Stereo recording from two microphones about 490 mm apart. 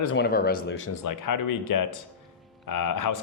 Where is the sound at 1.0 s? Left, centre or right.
Left.